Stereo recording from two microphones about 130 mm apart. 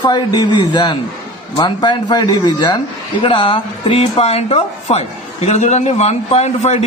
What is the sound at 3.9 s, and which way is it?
A man's voice, 55° left (ahead or behind).